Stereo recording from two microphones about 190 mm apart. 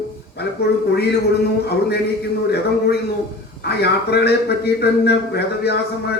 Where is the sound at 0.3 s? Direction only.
60° left (ahead or behind).